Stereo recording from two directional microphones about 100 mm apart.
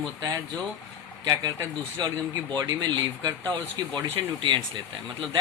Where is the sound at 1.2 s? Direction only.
40° right (ahead or behind).